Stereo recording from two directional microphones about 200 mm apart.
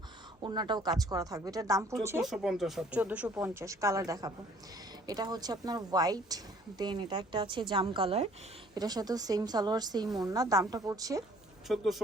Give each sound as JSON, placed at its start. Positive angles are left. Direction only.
{"t": 0.4, "sound": "speech", "side_deg": -20}
{"t": 2.2, "sound": "a woman's voice", "side_deg": 0}
{"t": 11.7, "sound": "speech", "side_deg": 0}